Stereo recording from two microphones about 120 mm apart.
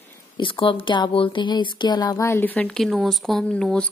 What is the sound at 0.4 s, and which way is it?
Speech, 45° left (ahead or behind).